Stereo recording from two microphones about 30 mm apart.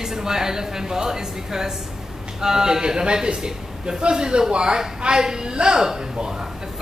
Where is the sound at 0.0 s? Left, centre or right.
Centre.